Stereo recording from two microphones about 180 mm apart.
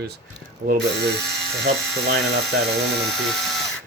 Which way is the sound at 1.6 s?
80° right.